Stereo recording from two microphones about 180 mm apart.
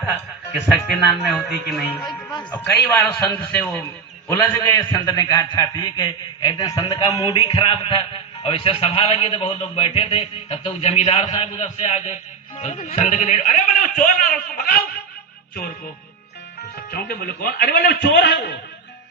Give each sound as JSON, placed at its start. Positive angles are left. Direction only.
{"t": 1.3, "sound": "speech", "side_deg": 0}
{"t": 2.5, "sound": "a man's voice", "side_deg": 15}
{"t": 16.9, "sound": "a man's voice", "side_deg": 60}